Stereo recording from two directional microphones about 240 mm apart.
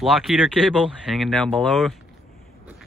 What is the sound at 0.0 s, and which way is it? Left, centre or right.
Speech, centre.